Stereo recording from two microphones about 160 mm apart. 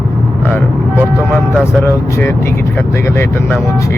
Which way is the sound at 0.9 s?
15° right (ahead or behind).